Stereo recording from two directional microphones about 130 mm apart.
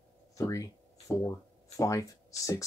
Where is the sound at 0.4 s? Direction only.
25° left (ahead or behind).